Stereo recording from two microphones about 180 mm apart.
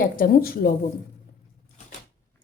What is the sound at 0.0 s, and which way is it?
Speech, 50° left (ahead or behind).